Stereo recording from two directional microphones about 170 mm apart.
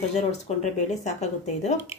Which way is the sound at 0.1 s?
40° left (ahead or behind).